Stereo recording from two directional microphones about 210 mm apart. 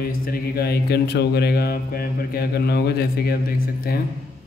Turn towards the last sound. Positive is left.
turn(degrees=45)  # may be behind; listen again after turning